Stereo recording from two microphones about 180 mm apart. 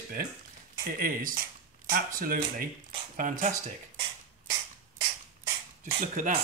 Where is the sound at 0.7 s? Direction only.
55° right (ahead or behind).